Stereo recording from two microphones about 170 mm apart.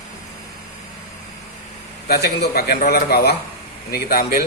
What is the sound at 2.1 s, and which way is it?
Speech, 70° left (ahead or behind).